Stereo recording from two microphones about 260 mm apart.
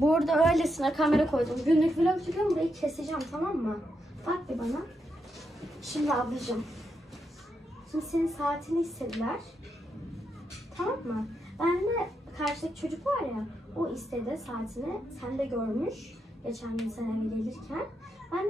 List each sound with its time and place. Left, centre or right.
0.1 s a woman's voice: centre
7.9 s a woman's voice: centre
10.8 s a woman's voice: centre